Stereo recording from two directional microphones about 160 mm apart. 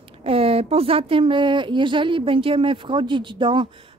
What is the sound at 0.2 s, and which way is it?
A woman's voice, 35° right (ahead or behind).